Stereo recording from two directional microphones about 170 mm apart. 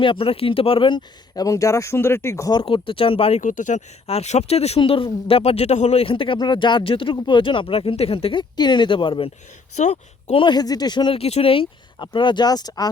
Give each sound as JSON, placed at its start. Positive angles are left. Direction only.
{"t": 0.0, "sound": "speech", "side_deg": 30}
{"t": 2.6, "sound": "speech", "side_deg": 30}
{"t": 3.4, "sound": "speech", "side_deg": 50}
{"t": 9.7, "sound": "speech", "side_deg": 40}